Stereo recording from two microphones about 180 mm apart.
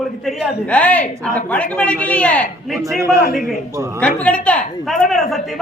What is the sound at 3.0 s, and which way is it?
Speech, 15° right (ahead or behind).